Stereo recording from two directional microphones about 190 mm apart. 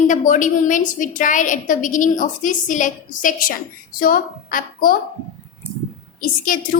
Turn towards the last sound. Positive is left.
turn(degrees=45)  # may be behind; listen again after turning